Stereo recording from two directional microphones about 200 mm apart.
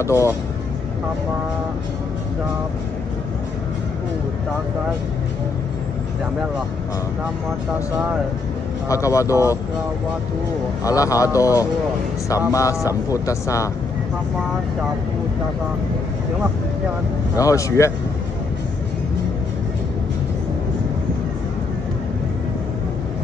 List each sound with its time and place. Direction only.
0.0 s speech: 15° left (ahead or behind)
8.8 s speech: 15° left (ahead or behind)
10.8 s speech: 15° left (ahead or behind)
17.4 s speech: 15° left (ahead or behind)